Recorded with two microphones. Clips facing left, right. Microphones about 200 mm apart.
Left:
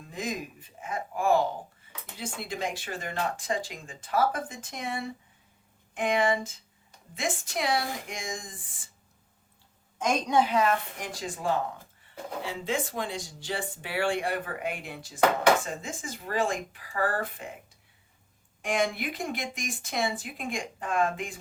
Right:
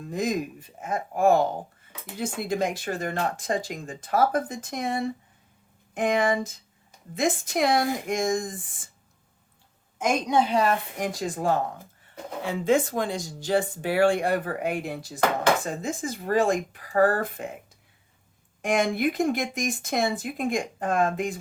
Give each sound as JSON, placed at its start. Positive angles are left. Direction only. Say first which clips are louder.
{"t": 0.1, "sound": "speech", "louder": "right 7 dB", "side_deg": -40}
{"t": 10.0, "sound": "a woman's voice", "louder": "right 3 dB", "side_deg": -10}
{"t": 10.5, "sound": "speech", "louder": "right 2 dB", "side_deg": -35}
{"t": 18.6, "sound": "speech", "louder": "right 5 dB", "side_deg": -45}